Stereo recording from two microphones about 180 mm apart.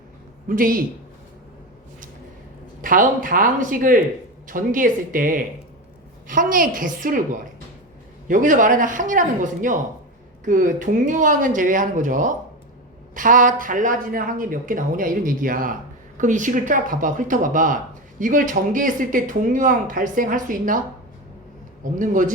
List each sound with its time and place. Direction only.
0.4 s speech: 50° right (ahead or behind)
2.8 s speech: 50° right (ahead or behind)
8.3 s speech: 45° right (ahead or behind)
21.9 s speech: 45° right (ahead or behind)